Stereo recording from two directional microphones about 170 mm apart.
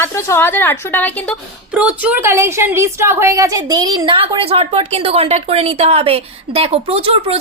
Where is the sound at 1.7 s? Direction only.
5° right (ahead or behind).